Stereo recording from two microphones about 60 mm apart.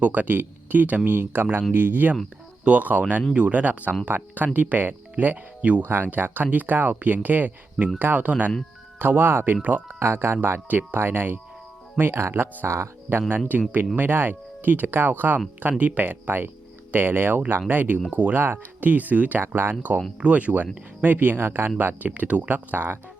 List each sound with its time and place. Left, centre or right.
0.0 s speech: right
10.0 s speech: right
10.7 s speech: right
13.1 s speech: right
19.4 s speech: right
20.1 s speech: right